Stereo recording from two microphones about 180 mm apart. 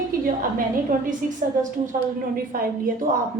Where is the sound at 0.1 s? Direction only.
50° right (ahead or behind).